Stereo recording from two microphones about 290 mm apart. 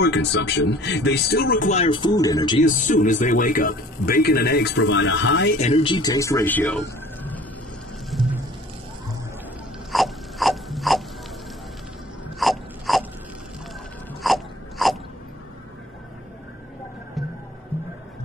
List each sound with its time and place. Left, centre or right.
0.0 s speech: left; by 2.6 s centre
2.6 s speech: left
5.6 s speech: left; by 6.8 s centre
9.9 s gears: centre
12.4 s a sound: centre
14.2 s wail: centre